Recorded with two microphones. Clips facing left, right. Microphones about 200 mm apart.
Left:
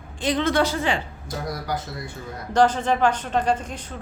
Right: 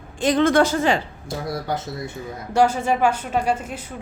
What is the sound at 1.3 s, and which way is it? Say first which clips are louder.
Speech: right 2 dB; 25° right (ahead or behind).